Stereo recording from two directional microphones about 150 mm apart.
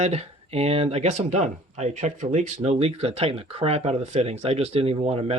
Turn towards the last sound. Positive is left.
turn(degrees=-40)  # may be behind; listen again after turning